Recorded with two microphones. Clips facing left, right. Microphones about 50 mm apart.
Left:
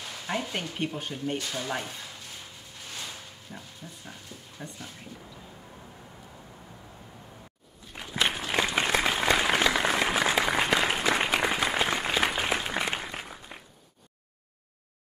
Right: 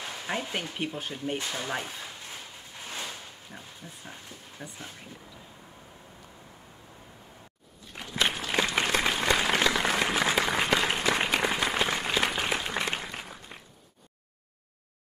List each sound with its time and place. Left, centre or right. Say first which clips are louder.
0.3 s speech: left 1 dB; centre
1.4 s speech: even; right
1.7 s speech: even; centre
3.5 s a sound: left 2 dB; centre
4.6 s speech: left 1 dB; centre
8.0 s applause: even; centre